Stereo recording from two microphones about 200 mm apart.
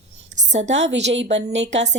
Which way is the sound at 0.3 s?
35° right (ahead or behind).